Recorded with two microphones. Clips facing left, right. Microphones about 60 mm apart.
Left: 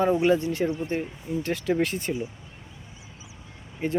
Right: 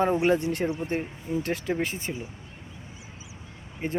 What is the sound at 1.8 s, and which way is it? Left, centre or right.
Speech, right.